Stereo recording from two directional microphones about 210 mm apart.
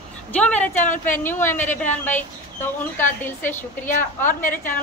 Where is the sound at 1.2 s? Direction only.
10° left (ahead or behind).